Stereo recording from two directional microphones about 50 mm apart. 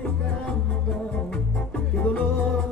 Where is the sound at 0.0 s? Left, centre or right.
Left.